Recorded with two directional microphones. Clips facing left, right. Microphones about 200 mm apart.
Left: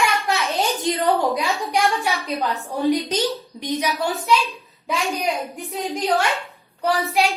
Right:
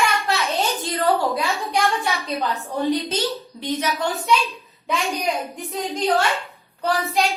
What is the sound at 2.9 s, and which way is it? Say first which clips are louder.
A woman's voice: left 3 dB; 15° left (ahead or behind).